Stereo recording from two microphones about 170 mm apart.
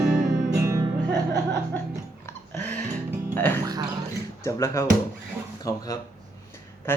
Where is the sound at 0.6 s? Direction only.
15° right (ahead or behind).